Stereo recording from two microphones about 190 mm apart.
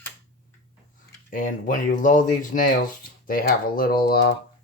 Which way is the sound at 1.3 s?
45° left (ahead or behind).